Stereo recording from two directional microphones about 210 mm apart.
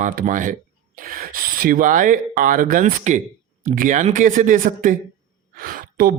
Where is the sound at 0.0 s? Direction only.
40° right (ahead or behind).